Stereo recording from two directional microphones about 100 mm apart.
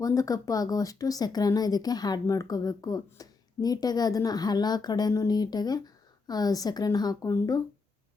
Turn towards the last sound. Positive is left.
turn(degrees=35)  # may be behind; listen again after turning